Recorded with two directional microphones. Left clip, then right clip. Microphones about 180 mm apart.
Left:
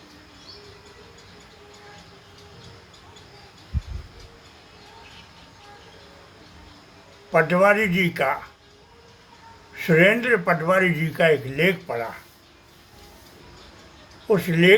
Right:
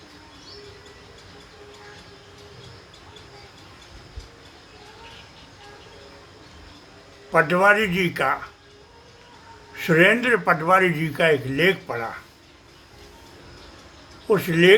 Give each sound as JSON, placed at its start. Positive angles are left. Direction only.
{"t": 7.3, "sound": "a man's voice", "side_deg": -15}
{"t": 9.7, "sound": "a man's voice", "side_deg": -20}
{"t": 14.3, "sound": "speech", "side_deg": -20}